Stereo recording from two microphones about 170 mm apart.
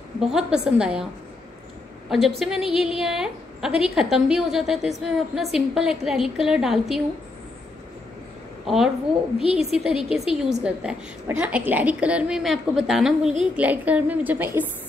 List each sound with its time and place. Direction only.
0.2 s a woman's voice: 5° right (ahead or behind)
2.0 s a woman's voice: centre (ahead or behind)
8.6 s a woman's voice: centre (ahead or behind)
9.5 s a woman's voice: 35° left (ahead or behind)
9.8 s a woman's voice: centre (ahead or behind)